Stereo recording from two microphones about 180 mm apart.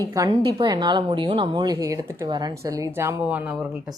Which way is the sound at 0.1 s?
20° right (ahead or behind).